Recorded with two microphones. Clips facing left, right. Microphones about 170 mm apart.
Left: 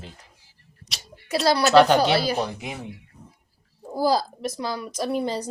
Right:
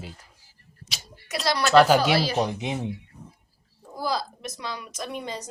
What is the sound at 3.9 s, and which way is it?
A woman's voice, 35° left (ahead or behind).